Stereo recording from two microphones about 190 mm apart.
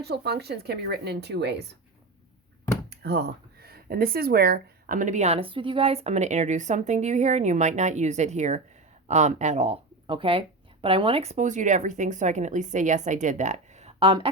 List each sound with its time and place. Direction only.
0.0 s speech: 60° right (ahead or behind)
2.9 s speech: 60° right (ahead or behind); by 14.3 s 30° right (ahead or behind)